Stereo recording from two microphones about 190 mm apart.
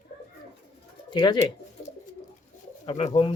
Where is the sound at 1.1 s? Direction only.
25° left (ahead or behind).